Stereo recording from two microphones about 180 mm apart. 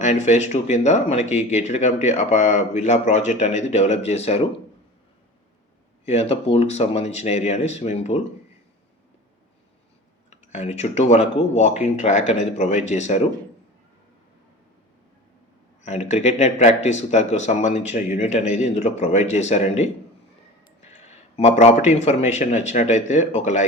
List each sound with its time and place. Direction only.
0.0 s speech: 40° left (ahead or behind)
6.1 s speech: 35° left (ahead or behind)
10.2 s speech: 40° left (ahead or behind)
15.8 s speech: 40° left (ahead or behind)